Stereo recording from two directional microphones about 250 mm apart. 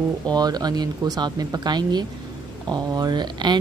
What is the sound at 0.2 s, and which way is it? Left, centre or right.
A woman's voice, centre.